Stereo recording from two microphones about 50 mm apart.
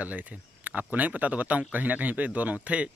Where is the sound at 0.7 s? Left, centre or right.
Right.